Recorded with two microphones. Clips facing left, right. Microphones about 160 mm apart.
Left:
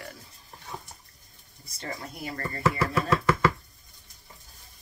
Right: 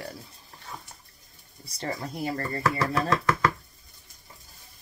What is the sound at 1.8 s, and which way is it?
Speech, 35° right (ahead or behind).